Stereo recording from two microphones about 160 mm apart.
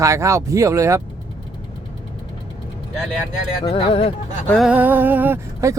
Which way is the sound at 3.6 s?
35° left (ahead or behind).